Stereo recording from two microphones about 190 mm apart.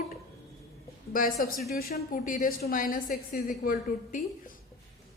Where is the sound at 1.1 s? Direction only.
45° left (ahead or behind).